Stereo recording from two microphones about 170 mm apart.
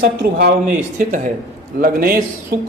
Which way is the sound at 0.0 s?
65° right (ahead or behind).